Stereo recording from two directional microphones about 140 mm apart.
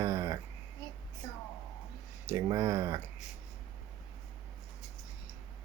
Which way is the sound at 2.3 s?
25° right (ahead or behind).